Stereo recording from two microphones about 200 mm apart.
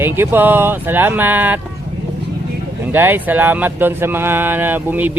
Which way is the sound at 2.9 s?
10° right (ahead or behind).